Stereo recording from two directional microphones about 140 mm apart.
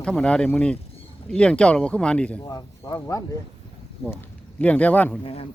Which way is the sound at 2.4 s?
25° left (ahead or behind).